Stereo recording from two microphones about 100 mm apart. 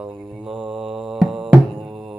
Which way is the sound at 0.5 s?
55° right (ahead or behind).